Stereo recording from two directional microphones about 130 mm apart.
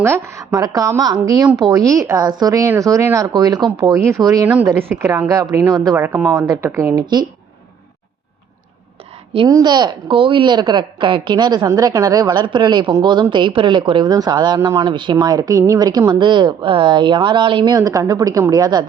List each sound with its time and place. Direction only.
0.0 s speech: 20° right (ahead or behind)
4.4 s speech: 15° right (ahead or behind)
9.5 s a woman's voice: 30° right (ahead or behind)